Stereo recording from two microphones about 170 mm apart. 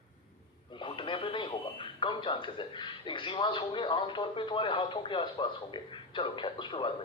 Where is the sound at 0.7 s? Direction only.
30° left (ahead or behind).